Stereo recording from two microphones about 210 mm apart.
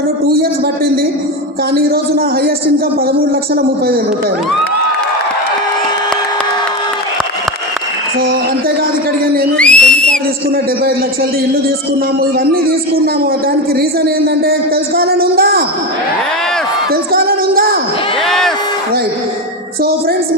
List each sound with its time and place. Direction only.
1.7 s speech: 45° right (ahead or behind)
9.6 s whistle: 5° left (ahead or behind)
13.7 s speech: 45° right (ahead or behind)
16.9 s speech: 45° right (ahead or behind)
18.3 s a sound: centre (ahead or behind)